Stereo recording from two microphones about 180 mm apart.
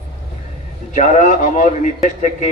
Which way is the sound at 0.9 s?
45° left (ahead or behind).